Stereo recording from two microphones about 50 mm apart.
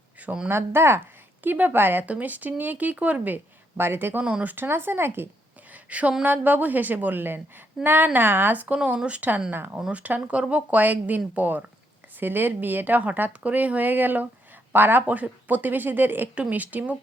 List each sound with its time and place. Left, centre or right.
0.4 s speech: right
1.5 s speech: right
2.0 s speech: right
3.3 s speech: right
4.2 s speech: right
4.4 s speech: right
5.7 s a sound: right
6.2 s speech: right
16.3 s speech: right